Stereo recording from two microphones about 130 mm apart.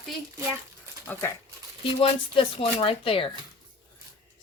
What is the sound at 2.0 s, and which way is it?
Speech, 45° left (ahead or behind).